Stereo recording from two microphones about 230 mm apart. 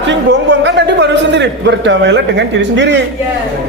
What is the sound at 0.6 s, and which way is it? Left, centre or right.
A man's voice, right.